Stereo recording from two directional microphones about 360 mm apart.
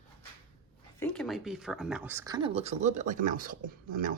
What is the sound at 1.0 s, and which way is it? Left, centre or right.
Speech, centre.